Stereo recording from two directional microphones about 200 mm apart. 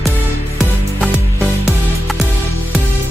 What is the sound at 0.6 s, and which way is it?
Music, 5° right (ahead or behind).